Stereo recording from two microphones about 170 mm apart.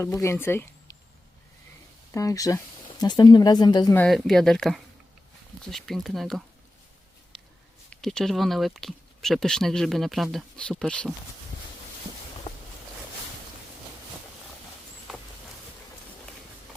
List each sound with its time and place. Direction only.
0.0 s speech: 15° left (ahead or behind)
2.1 s speech: 20° left (ahead or behind)
3.9 s speech: 5° left (ahead or behind)
7.9 s speech: 5° left (ahead or behind)